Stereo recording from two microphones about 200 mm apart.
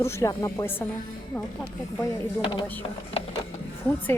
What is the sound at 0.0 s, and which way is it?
Speech, 15° left (ahead or behind).